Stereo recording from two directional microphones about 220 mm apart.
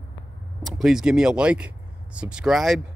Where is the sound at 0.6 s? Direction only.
Centre (ahead or behind).